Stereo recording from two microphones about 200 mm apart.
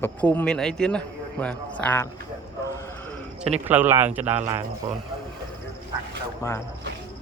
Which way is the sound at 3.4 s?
5° right (ahead or behind).